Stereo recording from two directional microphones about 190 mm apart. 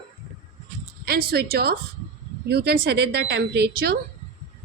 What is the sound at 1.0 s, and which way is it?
A woman's voice, 55° right (ahead or behind).